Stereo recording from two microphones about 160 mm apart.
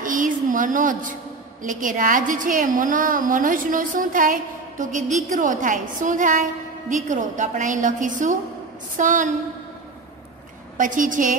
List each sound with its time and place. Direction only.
0.0 s a sound: 55° right (ahead or behind)
1.6 s a woman's voice: 55° right (ahead or behind)
10.8 s a woman's voice: 55° right (ahead or behind)